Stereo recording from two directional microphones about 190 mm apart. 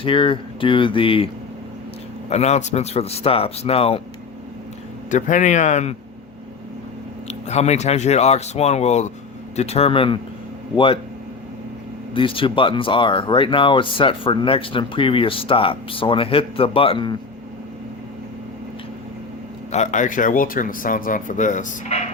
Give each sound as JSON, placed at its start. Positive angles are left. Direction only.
{"t": 0.0, "sound": "speech", "side_deg": 30}
{"t": 2.3, "sound": "speech", "side_deg": 35}
{"t": 5.1, "sound": "speech", "side_deg": 40}
{"t": 7.3, "sound": "speech", "side_deg": 35}
{"t": 12.1, "sound": "speech", "side_deg": 25}
{"t": 19.7, "sound": "speech", "side_deg": 40}